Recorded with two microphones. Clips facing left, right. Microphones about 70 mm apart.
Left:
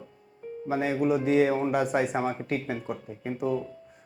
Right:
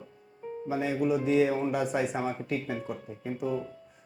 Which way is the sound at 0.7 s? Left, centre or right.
Left.